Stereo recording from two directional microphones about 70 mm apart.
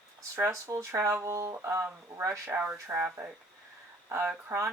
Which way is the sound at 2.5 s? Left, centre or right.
Right.